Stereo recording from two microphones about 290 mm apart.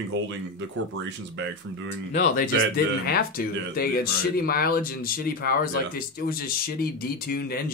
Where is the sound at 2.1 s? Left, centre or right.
Left.